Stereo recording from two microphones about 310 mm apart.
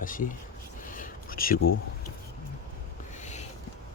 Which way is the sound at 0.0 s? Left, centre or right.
Left.